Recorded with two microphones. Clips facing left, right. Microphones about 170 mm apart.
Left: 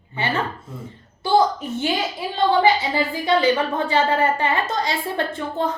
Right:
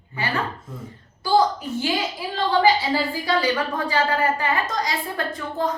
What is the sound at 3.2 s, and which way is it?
A woman's voice, 25° left (ahead or behind).